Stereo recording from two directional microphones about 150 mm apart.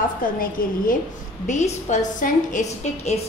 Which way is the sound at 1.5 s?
55° left (ahead or behind).